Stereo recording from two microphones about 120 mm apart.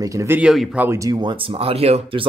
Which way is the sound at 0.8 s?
25° right (ahead or behind).